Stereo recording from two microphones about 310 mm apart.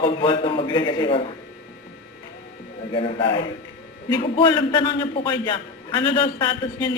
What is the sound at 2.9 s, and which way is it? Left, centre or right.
A man's voice, centre.